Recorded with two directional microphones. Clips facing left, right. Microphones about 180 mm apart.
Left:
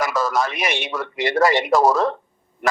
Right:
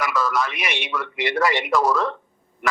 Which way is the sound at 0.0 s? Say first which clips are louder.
Left 2 dB; 40° left (ahead or behind).